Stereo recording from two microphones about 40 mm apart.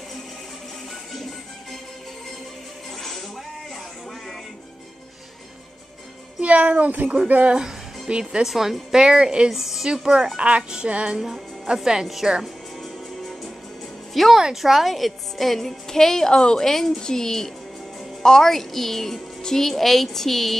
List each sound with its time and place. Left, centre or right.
1.1 s music: centre
3.0 s music: centre
6.4 s speech: right
6.9 s speech: right
8.1 s speech: right
8.5 s speech: centre
8.9 s speech: centre
9.5 s speech: centre
10.3 s speech: right
13.2 s music: centre
14.1 s a woman's voice: centre
16.3 s a woman's voice: left
16.6 s a woman's voice: centre